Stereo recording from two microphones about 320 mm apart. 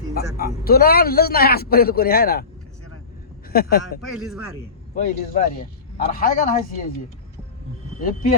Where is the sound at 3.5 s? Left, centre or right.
Left.